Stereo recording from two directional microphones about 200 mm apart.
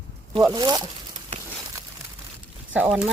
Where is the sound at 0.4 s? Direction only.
20° right (ahead or behind).